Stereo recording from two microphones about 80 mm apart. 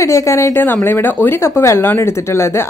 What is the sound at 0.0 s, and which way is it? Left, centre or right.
Speech, left.